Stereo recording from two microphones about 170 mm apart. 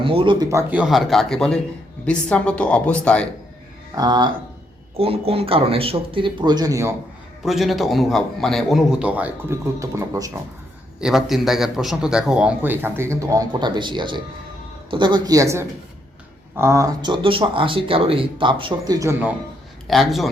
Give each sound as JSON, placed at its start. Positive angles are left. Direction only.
{"t": 0.0, "sound": "speech", "side_deg": -30}
{"t": 0.7, "sound": "a man's voice", "side_deg": -5}
{"t": 3.9, "sound": "speech", "side_deg": -25}
{"t": 4.9, "sound": "speech", "side_deg": -35}
{"t": 7.4, "sound": "a man's voice", "side_deg": 0}
{"t": 11.0, "sound": "a man's voice", "side_deg": 0}
{"t": 19.9, "sound": "a man's voice", "side_deg": 0}